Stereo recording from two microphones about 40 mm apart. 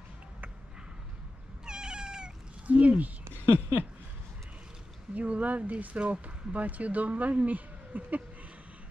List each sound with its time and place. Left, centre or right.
1.7 s cat: centre
2.6 s speech: right
3.3 s a sound: right
5.1 s speech: right